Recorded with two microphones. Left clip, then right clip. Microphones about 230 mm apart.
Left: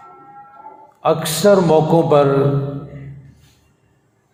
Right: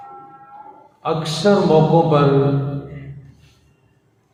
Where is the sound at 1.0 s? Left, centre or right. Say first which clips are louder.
Left 4 dB; left.